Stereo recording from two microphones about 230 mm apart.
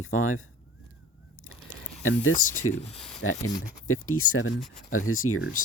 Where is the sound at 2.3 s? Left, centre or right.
Left.